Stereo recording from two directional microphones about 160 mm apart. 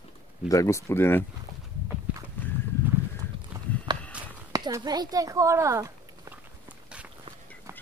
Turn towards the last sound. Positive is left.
turn(degrees=-5)  # may be behind; listen again after turning